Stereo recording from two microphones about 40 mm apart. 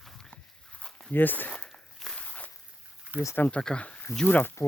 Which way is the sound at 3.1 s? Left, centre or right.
Right.